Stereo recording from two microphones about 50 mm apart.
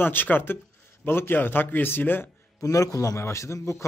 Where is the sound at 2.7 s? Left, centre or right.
Left.